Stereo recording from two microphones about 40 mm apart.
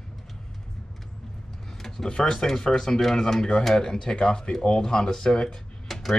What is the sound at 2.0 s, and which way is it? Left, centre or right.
Speech, centre.